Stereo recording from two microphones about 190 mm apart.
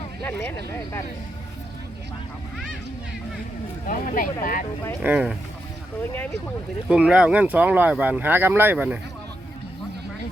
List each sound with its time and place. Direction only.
0.2 s speech: 10° left (ahead or behind)
3.8 s speech: 45° left (ahead or behind)
5.0 s speech: 5° right (ahead or behind)
6.8 s speech: 5° right (ahead or behind)